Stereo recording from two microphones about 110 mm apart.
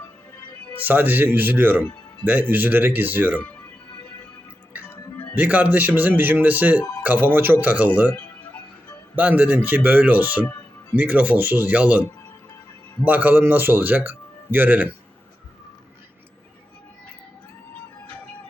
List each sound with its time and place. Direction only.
0.8 s speech: 15° right (ahead or behind)
5.4 s speech: 15° right (ahead or behind)
9.1 s speech: 15° right (ahead or behind)
13.1 s speech: 15° right (ahead or behind)